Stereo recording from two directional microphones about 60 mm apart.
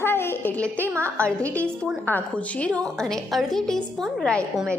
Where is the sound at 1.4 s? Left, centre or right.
Left; by 4.4 s centre.